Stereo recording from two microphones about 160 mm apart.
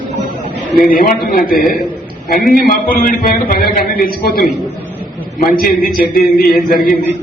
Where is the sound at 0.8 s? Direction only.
60° left (ahead or behind).